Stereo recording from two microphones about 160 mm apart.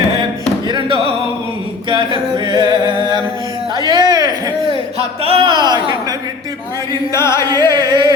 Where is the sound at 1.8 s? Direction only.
30° right (ahead or behind).